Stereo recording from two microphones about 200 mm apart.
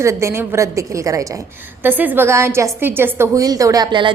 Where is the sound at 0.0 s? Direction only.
15° right (ahead or behind).